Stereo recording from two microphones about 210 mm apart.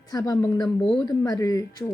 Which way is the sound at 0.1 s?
15° left (ahead or behind).